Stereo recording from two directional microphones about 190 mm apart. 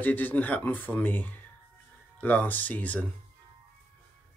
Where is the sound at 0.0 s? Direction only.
10° left (ahead or behind).